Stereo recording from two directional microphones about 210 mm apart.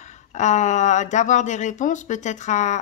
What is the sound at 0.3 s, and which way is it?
Speech, 35° left (ahead or behind).